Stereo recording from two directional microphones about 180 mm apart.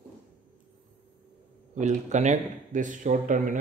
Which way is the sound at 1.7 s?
40° right (ahead or behind).